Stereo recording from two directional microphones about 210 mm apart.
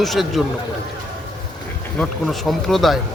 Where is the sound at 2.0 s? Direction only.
Centre (ahead or behind).